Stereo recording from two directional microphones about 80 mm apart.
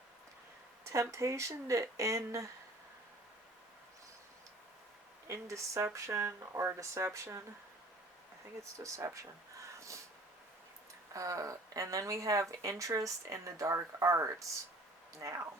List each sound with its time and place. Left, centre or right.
0.9 s speech: right
5.3 s speech: right
8.8 s speech: right
11.1 s speech: right